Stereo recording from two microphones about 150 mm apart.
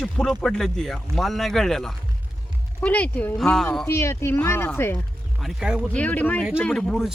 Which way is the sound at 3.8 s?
15° left (ahead or behind).